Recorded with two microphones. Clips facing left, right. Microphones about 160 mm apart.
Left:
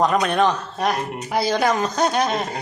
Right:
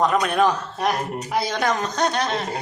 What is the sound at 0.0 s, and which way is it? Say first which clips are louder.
A woman's voice: left 1 dB; centre (ahead or behind).